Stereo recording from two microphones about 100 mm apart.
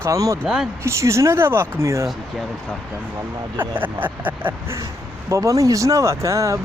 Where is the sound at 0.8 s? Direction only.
30° right (ahead or behind).